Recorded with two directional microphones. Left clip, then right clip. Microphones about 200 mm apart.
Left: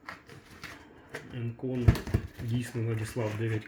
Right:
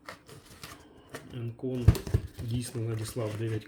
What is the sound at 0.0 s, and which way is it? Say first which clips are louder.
Typewriter: left 1 dB; 65° right (ahead or behind).